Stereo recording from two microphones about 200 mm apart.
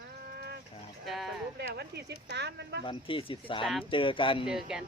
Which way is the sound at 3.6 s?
Centre (ahead or behind).